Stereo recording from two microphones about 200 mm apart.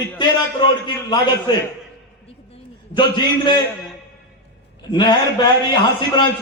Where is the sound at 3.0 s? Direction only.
25° left (ahead or behind).